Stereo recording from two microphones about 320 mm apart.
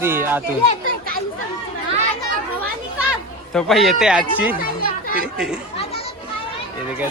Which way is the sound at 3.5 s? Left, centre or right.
Centre.